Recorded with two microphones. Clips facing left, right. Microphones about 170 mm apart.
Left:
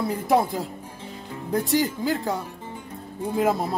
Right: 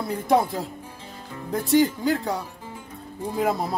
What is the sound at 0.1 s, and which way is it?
Speech, centre (ahead or behind).